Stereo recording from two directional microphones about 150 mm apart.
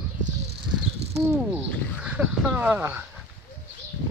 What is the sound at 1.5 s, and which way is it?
Speech, 10° right (ahead or behind).